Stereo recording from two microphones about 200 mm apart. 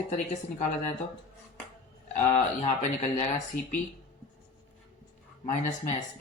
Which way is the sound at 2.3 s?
35° left (ahead or behind).